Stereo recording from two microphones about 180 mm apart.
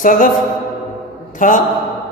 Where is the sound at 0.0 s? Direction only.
45° left (ahead or behind).